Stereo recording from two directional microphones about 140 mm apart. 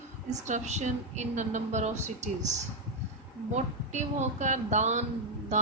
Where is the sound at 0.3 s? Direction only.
60° right (ahead or behind).